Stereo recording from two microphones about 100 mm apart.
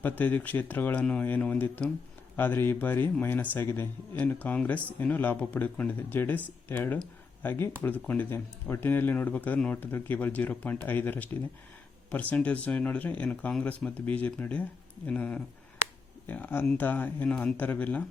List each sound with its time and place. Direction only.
0.0 s a man's voice: 20° left (ahead or behind)